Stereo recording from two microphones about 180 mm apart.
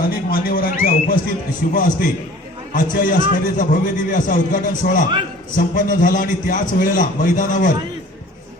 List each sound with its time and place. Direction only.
0.0 s a man's voice: 55° left (ahead or behind)